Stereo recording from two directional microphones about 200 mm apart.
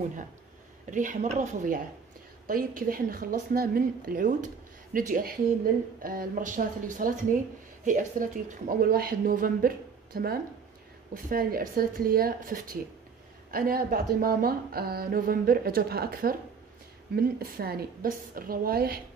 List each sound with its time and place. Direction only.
0.8 s speech: 40° right (ahead or behind)